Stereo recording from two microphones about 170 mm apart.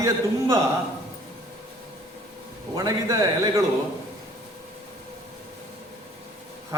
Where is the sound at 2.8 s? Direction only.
20° right (ahead or behind).